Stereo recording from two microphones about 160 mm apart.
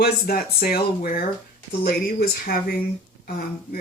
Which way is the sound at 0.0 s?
70° left (ahead or behind).